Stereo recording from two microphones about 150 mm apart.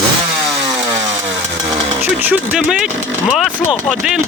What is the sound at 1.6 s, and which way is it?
Speech, 20° right (ahead or behind).